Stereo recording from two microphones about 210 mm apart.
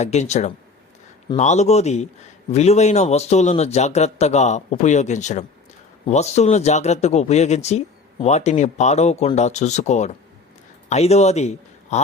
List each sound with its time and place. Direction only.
0.0 s a man's voice: 35° left (ahead or behind)